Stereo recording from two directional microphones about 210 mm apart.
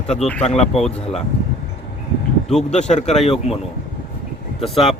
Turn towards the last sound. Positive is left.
turn(degrees=25)  # may be behind; listen again after turning